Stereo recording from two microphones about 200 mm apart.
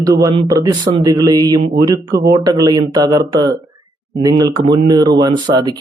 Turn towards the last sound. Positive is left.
turn(degrees=-20)  # may be behind; listen again after turning